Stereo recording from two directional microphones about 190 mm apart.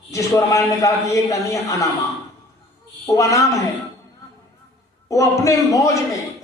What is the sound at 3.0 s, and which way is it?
Speech, 15° left (ahead or behind).